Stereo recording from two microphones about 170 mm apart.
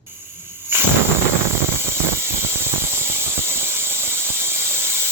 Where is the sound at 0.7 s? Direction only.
15° right (ahead or behind).